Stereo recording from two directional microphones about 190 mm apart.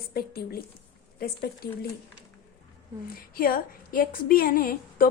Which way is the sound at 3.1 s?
50° left (ahead or behind).